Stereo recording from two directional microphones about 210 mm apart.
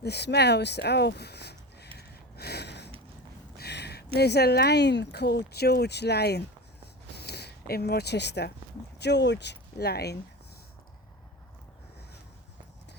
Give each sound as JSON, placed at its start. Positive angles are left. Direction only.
{"t": 0.0, "sound": "speech", "side_deg": 50}
{"t": 2.0, "sound": "gasp", "side_deg": 50}
{"t": 3.6, "sound": "speech", "side_deg": 50}